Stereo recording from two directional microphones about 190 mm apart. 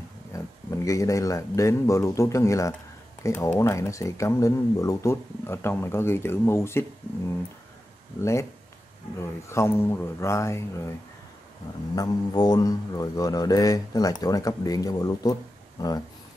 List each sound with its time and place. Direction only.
0.3 s speech: 15° left (ahead or behind)
8.2 s speech: 15° left (ahead or behind)
9.5 s speech: 15° left (ahead or behind)
11.9 s speech: 20° left (ahead or behind)